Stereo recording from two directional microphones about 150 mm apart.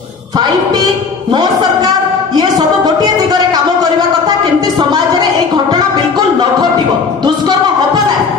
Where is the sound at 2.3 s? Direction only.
25° right (ahead or behind).